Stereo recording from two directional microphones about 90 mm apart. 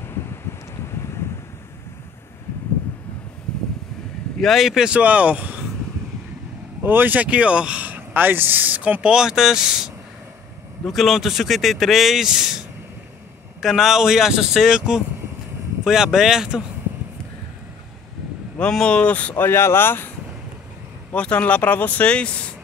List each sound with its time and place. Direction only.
4.4 s speech: centre (ahead or behind)
6.8 s speech: 25° right (ahead or behind); by 9.8 s 5° right (ahead or behind)
10.9 s speech: centre (ahead or behind)
18.6 s speech: 10° left (ahead or behind); by 20.1 s 25° left (ahead or behind)
21.1 s speech: 15° left (ahead or behind)